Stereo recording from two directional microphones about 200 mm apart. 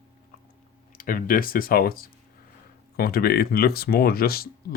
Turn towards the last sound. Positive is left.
turn(degrees=50)  # may be behind; listen again after turning